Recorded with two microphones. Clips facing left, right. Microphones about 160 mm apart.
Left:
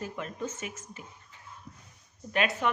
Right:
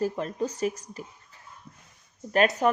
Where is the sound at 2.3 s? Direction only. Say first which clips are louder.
Right 6 dB; 40° right (ahead or behind).